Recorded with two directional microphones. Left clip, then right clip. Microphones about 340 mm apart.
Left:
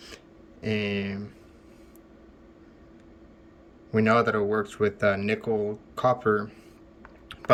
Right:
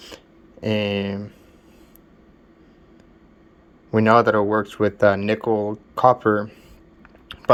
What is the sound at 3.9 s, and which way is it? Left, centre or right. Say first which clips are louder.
Speech: right 7 dB; centre.